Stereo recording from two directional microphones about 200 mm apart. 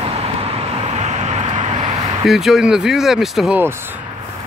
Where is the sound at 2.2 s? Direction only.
Centre (ahead or behind).